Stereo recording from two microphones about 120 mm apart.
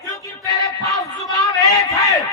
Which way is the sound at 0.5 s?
30° left (ahead or behind).